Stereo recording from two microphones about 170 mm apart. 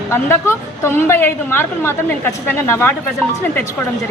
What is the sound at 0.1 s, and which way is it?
A woman's voice, 15° left (ahead or behind).